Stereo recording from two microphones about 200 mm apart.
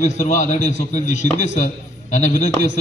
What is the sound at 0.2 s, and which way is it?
A man's voice, 35° left (ahead or behind).